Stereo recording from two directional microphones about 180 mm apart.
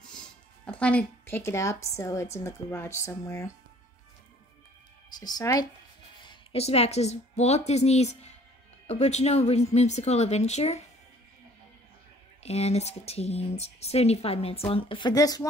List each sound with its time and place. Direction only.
0.7 s a woman's voice: 5° left (ahead or behind)
5.2 s speech: 20° left (ahead or behind)
6.2 s a woman's voice: 35° left (ahead or behind)
12.4 s speech: 35° left (ahead or behind)